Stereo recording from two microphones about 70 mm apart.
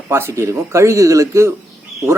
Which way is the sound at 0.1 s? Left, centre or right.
Right.